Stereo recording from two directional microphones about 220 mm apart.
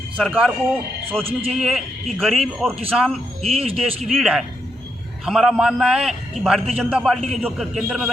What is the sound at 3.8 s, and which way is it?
A man's voice, centre (ahead or behind).